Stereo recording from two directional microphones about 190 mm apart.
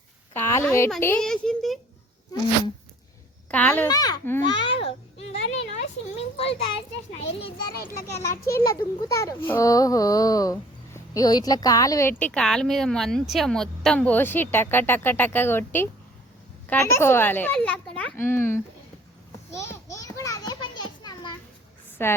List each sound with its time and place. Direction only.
0.3 s a woman's voice: 10° left (ahead or behind)
3.5 s a child's voice: 5° left (ahead or behind)
3.8 s a child's voice: 20° left (ahead or behind)
4.5 s a child's voice: 30° left (ahead or behind)
8.6 s a child's voice: 15° left (ahead or behind)
19.5 s children playing: 15° left (ahead or behind)
22.0 s a child's voice: 10° left (ahead or behind)